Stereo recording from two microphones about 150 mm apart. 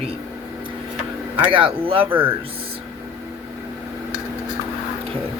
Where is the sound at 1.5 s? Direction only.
35° right (ahead or behind).